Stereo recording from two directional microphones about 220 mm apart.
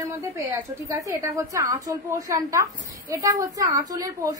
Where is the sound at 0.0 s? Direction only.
10° right (ahead or behind).